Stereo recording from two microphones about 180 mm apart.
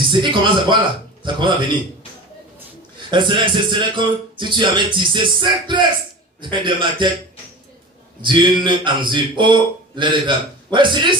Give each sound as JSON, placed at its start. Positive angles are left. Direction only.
{"t": 0.1, "sound": "a man's voice", "side_deg": -25}
{"t": 3.1, "sound": "a man's voice", "side_deg": -25}
{"t": 8.2, "sound": "a man's voice", "side_deg": -25}